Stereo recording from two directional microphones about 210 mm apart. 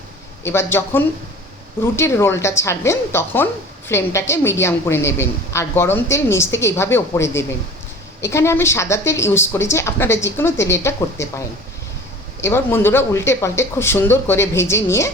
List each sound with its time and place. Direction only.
0.4 s a woman's voice: 10° left (ahead or behind)